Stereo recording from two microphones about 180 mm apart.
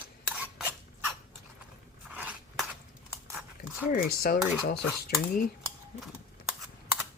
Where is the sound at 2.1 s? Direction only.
5° right (ahead or behind).